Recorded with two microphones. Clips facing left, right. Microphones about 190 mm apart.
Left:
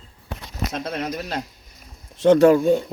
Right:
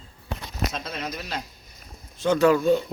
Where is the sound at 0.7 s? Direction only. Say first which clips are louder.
Left 6 dB; 55° left (ahead or behind).